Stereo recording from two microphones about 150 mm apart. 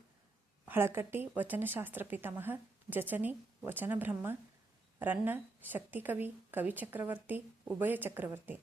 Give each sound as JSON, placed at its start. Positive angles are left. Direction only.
{"t": 0.6, "sound": "a woman's voice", "side_deg": -15}